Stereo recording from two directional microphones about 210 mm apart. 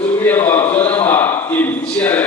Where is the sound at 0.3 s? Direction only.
10° left (ahead or behind).